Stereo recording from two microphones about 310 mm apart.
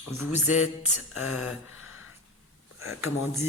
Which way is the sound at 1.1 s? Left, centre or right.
Left.